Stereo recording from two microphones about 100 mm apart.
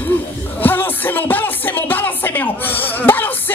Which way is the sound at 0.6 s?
20° left (ahead or behind).